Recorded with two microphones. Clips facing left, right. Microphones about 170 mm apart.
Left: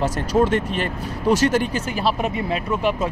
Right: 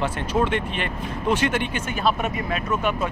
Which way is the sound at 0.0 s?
40° left (ahead or behind).